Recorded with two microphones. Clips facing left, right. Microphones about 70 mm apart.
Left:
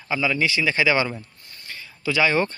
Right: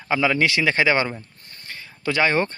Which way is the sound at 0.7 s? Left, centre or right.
Right.